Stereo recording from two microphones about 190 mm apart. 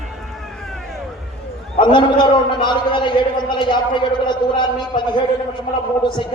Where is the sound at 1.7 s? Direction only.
25° left (ahead or behind).